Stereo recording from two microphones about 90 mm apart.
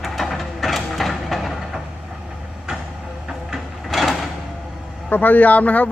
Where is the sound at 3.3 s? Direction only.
5° right (ahead or behind).